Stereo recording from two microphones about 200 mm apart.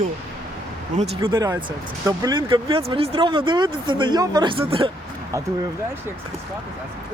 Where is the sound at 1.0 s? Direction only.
25° right (ahead or behind).